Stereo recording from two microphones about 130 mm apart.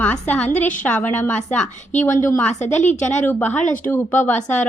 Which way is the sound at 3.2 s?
15° left (ahead or behind).